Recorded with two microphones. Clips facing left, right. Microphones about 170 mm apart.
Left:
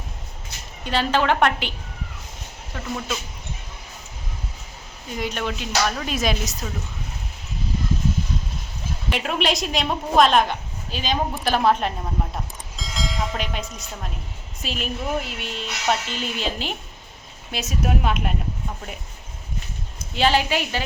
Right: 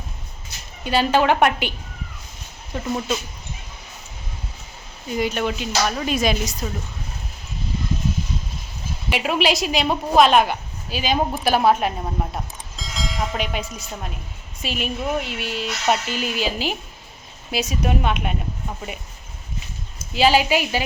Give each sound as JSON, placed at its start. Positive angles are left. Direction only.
{"t": 0.9, "sound": "a woman's voice", "side_deg": -10}
{"t": 2.7, "sound": "speech", "side_deg": -25}
{"t": 5.1, "sound": "speech", "side_deg": -5}
{"t": 9.0, "sound": "a woman's voice", "side_deg": -5}
{"t": 20.1, "sound": "a woman's voice", "side_deg": -5}